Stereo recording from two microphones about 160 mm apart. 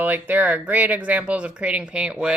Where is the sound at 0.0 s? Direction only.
10° right (ahead or behind).